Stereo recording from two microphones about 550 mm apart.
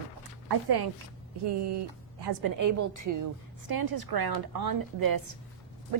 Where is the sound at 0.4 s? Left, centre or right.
Right.